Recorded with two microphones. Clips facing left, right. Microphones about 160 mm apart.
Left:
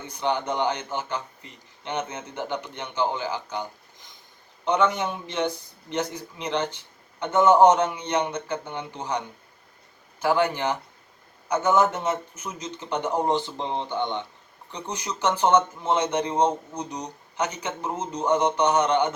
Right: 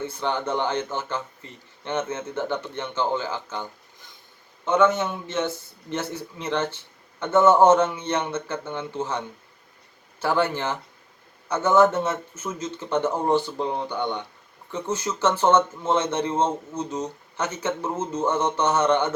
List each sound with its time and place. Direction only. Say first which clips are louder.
0.1 s speech: even; 15° left (ahead or behind)